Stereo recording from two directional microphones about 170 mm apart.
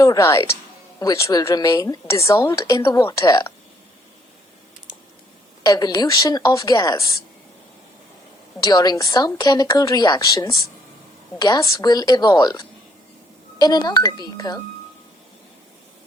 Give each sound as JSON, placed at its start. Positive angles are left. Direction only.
{"t": 0.0, "sound": "speech", "side_deg": 20}
{"t": 5.6, "sound": "speech", "side_deg": 25}
{"t": 8.6, "sound": "speech", "side_deg": 20}